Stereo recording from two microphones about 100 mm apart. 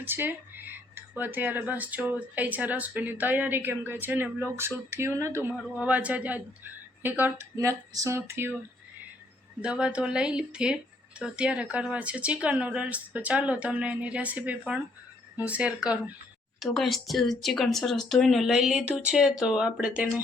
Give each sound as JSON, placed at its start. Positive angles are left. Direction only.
{"t": 0.0, "sound": "a woman's voice", "side_deg": -20}
{"t": 5.8, "sound": "a woman's voice", "side_deg": -15}
{"t": 7.5, "sound": "a woman's voice", "side_deg": -35}
{"t": 9.6, "sound": "speech", "side_deg": -10}
{"t": 16.6, "sound": "speech", "side_deg": 0}